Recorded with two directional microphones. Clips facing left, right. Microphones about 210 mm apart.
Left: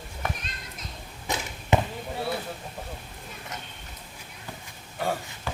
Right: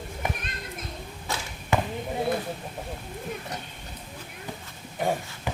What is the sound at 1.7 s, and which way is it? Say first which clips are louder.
Basketball bounce: left 2 dB; 20° left (ahead or behind).